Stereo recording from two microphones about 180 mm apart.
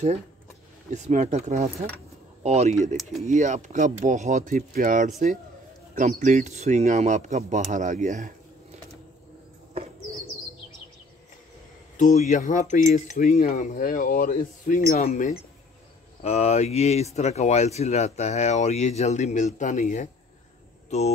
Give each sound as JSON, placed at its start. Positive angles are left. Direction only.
{"t": 0.9, "sound": "speech", "side_deg": -40}
{"t": 12.0, "sound": "cutlery", "side_deg": 40}
{"t": 15.0, "sound": "speech", "side_deg": 40}